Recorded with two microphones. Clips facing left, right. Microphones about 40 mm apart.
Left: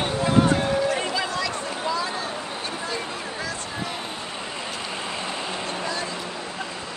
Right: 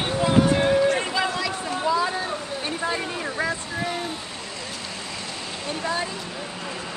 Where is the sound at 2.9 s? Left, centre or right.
Right.